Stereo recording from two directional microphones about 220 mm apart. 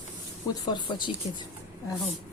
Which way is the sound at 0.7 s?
20° left (ahead or behind).